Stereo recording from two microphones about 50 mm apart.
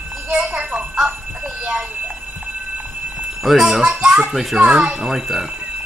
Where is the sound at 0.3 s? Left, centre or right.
Centre.